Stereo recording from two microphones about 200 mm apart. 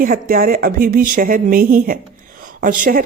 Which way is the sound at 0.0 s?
45° right (ahead or behind).